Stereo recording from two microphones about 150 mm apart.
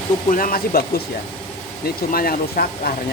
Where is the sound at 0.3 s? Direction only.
70° left (ahead or behind); by 2.9 s 85° left.